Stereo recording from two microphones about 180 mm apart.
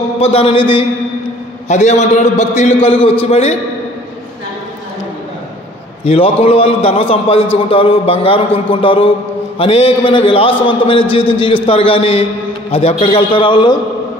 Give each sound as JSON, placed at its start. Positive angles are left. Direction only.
{"t": 0.2, "sound": "a man's voice", "side_deg": 35}
{"t": 1.7, "sound": "a man's voice", "side_deg": 40}
{"t": 6.0, "sound": "a man's voice", "side_deg": 35}